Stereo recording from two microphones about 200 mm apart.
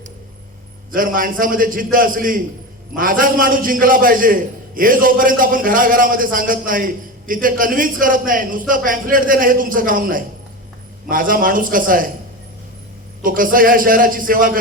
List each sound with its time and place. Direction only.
0.9 s a man's voice: 45° right (ahead or behind)
13.2 s a man's voice: 45° right (ahead or behind)